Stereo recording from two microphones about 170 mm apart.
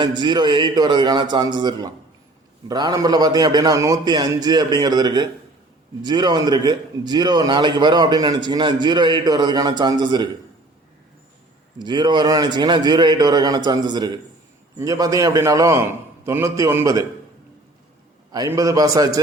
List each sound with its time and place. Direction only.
0.0 s a man's voice: 25° right (ahead or behind)
11.8 s a man's voice: 25° right (ahead or behind)
18.3 s a man's voice: 20° right (ahead or behind)